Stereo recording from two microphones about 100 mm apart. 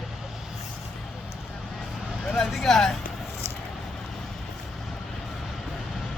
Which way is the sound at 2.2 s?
Centre (ahead or behind).